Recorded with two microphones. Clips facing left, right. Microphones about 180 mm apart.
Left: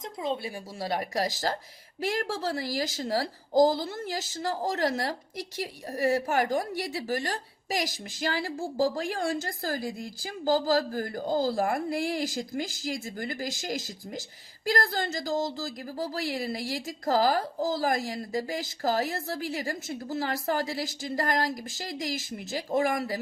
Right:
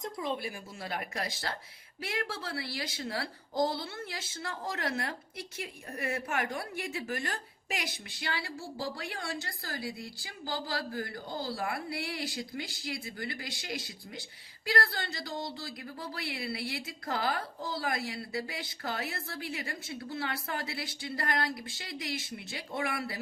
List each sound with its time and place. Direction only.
0.0 s speech: 25° left (ahead or behind); by 23.1 s 40° left (ahead or behind)